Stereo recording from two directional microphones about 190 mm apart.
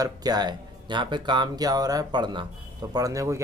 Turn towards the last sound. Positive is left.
turn(degrees=-15)  # may be behind; listen again after turning